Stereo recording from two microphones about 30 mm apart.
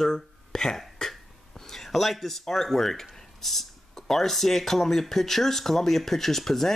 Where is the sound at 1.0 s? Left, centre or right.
Centre.